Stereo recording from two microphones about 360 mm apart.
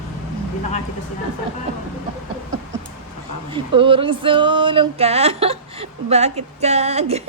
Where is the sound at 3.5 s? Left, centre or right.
Centre.